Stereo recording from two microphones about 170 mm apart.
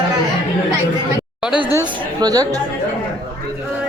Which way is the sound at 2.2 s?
20° right (ahead or behind).